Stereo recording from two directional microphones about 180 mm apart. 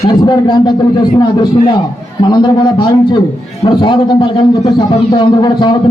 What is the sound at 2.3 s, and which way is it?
A man's voice, 25° left (ahead or behind).